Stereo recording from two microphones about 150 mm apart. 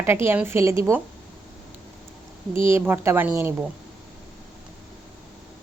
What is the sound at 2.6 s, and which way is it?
Speech, 15° right (ahead or behind).